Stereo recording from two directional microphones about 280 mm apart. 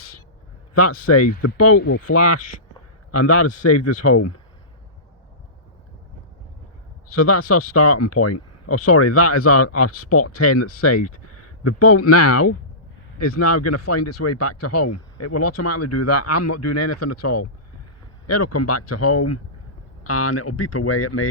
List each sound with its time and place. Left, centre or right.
0.8 s speech: left
1.8 s speech: left
2.1 s speech: left
7.2 s speech: left